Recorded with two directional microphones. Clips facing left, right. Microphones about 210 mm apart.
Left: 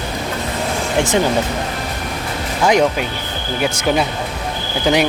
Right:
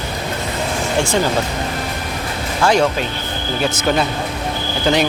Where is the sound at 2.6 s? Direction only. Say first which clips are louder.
Left 1 dB; 15° left (ahead or behind).